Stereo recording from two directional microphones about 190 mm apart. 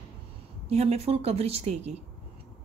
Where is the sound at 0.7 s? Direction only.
35° right (ahead or behind).